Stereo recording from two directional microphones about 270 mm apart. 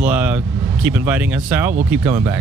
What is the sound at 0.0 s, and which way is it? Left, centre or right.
Vehicle, centre.